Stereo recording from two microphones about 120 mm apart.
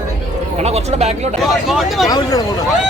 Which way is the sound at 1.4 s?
Centre (ahead or behind).